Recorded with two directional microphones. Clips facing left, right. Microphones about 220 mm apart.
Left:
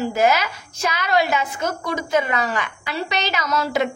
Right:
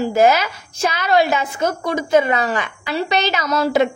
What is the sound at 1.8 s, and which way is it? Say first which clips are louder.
A woman's voice: right 6 dB; 30° right (ahead or behind).